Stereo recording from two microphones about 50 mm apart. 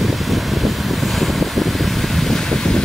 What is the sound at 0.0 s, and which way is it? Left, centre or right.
Wind, centre.